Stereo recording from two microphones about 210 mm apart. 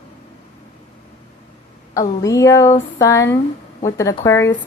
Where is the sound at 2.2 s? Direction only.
15° left (ahead or behind).